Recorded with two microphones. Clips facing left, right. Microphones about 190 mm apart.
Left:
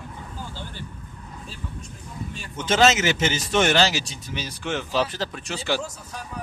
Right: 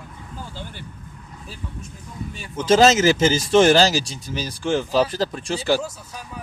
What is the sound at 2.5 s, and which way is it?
Speech, 35° right (ahead or behind).